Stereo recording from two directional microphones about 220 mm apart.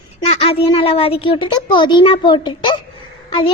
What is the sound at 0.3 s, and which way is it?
A woman's voice, 25° left (ahead or behind).